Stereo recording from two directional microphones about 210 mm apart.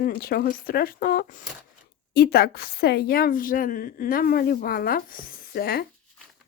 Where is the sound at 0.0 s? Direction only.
45° left (ahead or behind).